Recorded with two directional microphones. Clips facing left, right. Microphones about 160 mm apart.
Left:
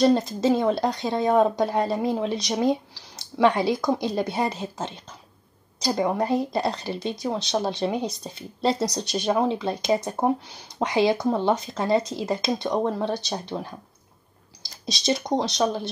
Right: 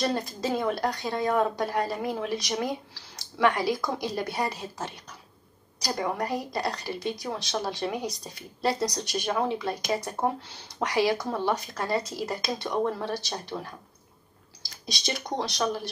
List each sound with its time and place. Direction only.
0.0 s speech: 20° left (ahead or behind)